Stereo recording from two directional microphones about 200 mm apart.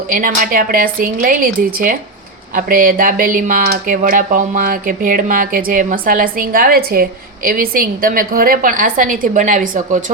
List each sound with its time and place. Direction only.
0.1 s speech: 45° right (ahead or behind)